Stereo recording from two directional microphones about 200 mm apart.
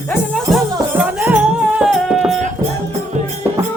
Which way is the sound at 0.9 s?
10° right (ahead or behind).